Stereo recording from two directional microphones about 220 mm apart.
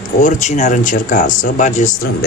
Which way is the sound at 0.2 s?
35° left (ahead or behind).